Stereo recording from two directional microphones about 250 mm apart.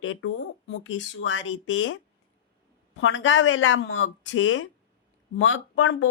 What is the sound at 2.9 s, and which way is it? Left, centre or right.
Speech, left.